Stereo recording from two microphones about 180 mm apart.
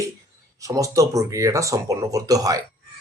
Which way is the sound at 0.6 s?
20° right (ahead or behind).